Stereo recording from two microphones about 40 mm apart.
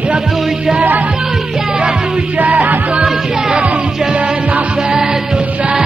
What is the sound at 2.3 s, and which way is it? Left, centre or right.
Music, right.